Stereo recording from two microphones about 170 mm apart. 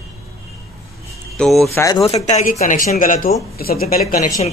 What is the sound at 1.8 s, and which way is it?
Speech, 20° left (ahead or behind).